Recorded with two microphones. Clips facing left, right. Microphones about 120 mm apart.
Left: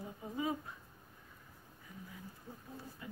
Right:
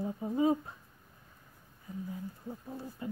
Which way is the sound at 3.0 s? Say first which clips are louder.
Right 11 dB; 30° right (ahead or behind).